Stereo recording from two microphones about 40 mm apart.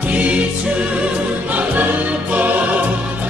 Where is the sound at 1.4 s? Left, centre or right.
Right.